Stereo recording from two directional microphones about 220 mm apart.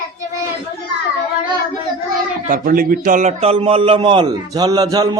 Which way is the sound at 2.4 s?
40° right (ahead or behind).